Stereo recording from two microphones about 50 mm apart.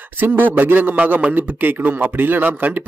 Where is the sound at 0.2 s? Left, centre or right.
Right.